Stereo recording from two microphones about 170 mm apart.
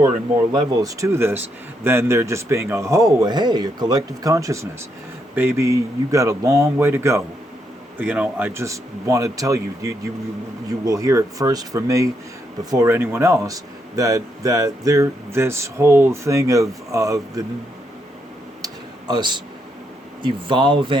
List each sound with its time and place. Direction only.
0.5 s speech: 20° right (ahead or behind)
18.6 s a sound: 25° right (ahead or behind)
20.2 s speech: 30° right (ahead or behind)